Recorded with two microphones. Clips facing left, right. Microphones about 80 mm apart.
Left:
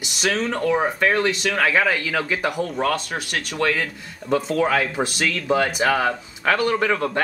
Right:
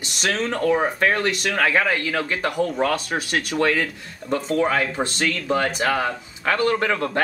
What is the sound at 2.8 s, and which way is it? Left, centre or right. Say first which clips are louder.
Speech: right 1 dB; right.